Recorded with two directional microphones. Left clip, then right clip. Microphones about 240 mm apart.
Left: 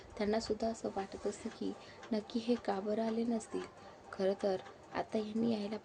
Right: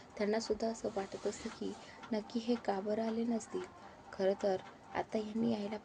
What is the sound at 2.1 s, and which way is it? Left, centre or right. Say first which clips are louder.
Speech: left 1 dB; centre.